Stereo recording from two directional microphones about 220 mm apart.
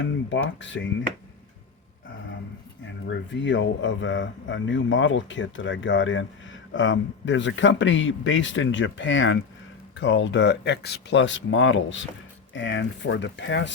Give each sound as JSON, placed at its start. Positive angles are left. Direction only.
{"t": 0.0, "sound": "speech", "side_deg": 55}
{"t": 2.8, "sound": "speech", "side_deg": 55}